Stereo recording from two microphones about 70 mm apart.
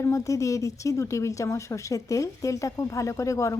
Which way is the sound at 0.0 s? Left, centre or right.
Left.